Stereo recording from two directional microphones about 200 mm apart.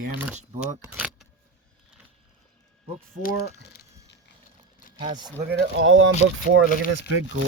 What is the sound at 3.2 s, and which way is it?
Speech, 45° left (ahead or behind).